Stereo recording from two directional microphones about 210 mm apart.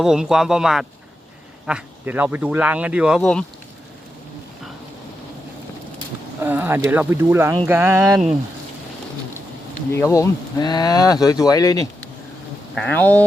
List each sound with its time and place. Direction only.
0.0 s speech: 5° right (ahead or behind)
6.4 s speech: 10° right (ahead or behind)
9.9 s speech: 15° left (ahead or behind)